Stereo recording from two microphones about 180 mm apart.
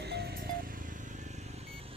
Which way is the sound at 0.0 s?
65° right (ahead or behind).